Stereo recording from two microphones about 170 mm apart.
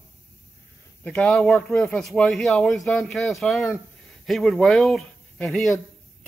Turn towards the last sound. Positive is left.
turn(degrees=5)  # may be behind; listen again after turning